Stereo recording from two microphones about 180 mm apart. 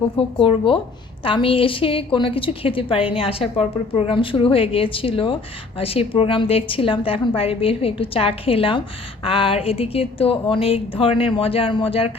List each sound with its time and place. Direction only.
0.2 s a woman's voice: 30° left (ahead or behind)